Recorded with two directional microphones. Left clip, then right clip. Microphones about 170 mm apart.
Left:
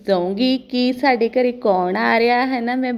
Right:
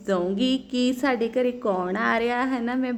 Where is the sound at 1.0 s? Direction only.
20° left (ahead or behind).